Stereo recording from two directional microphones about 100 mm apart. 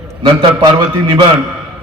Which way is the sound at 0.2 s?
50° right (ahead or behind).